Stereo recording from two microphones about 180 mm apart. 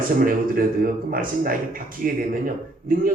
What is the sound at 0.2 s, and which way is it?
A man's voice, 50° right (ahead or behind).